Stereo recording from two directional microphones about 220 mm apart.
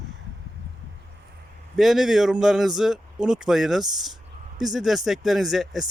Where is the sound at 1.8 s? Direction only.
Centre (ahead or behind).